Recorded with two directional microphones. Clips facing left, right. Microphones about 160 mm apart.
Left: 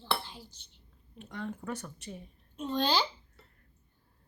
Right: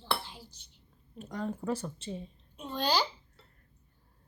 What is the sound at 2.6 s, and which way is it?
Speech, 5° right (ahead or behind).